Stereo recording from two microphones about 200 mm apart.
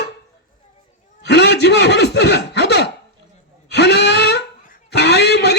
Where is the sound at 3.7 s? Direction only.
55° left (ahead or behind).